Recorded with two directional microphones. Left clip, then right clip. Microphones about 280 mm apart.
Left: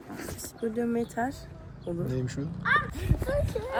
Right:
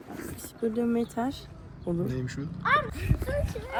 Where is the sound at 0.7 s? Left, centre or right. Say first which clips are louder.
Even; centre.